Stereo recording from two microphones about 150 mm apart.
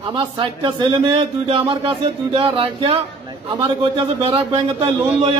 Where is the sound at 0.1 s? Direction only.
30° right (ahead or behind).